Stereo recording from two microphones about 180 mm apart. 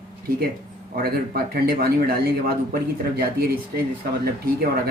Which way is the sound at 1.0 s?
60° right (ahead or behind).